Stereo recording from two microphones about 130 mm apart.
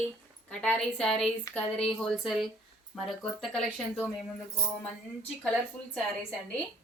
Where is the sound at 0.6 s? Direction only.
5° left (ahead or behind).